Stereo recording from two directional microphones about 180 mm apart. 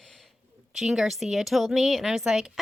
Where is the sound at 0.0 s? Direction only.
Centre (ahead or behind).